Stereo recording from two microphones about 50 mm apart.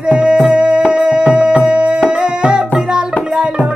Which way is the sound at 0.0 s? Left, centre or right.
Centre.